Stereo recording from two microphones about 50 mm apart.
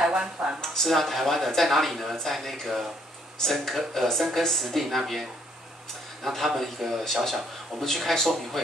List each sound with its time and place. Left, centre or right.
0.1 s speech: right
0.6 s speech: centre